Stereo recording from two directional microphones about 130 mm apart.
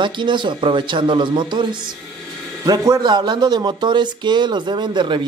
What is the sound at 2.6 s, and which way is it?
Speech, 25° right (ahead or behind).